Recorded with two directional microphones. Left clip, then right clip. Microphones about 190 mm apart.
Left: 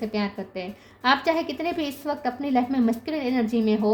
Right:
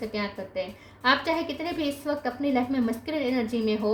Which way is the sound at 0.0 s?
50° left (ahead or behind).